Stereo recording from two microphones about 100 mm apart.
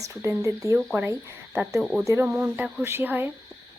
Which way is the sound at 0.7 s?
15° right (ahead or behind).